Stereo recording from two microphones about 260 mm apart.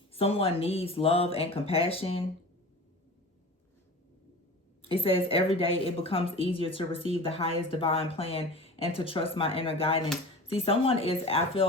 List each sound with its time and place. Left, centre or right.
0.1 s speech: left
4.8 s speech: left